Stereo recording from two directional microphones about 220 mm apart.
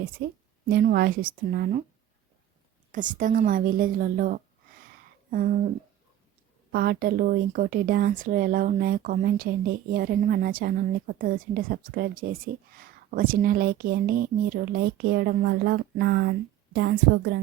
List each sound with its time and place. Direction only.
0.2 s a woman's voice: 45° right (ahead or behind)
2.9 s speech: 35° right (ahead or behind)
6.7 s a woman's voice: 45° right (ahead or behind)